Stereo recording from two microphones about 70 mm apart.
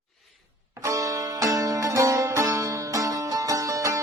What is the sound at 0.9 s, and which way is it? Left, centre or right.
Music, right.